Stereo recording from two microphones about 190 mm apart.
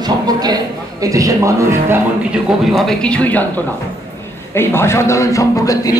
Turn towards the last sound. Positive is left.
turn(degrees=20)  # may be behind; listen again after turning